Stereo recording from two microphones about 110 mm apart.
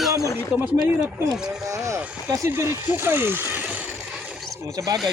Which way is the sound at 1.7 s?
30° right (ahead or behind).